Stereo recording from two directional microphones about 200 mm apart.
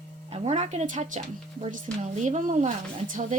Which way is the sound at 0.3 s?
35° right (ahead or behind).